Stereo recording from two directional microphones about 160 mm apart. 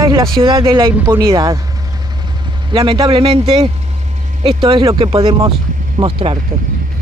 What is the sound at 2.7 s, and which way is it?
Speech, 35° right (ahead or behind).